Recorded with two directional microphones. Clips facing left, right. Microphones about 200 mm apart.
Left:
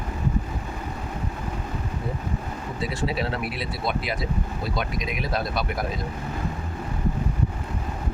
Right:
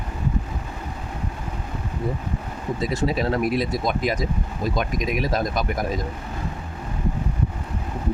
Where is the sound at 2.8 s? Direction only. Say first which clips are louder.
Right 4 dB; 40° right (ahead or behind).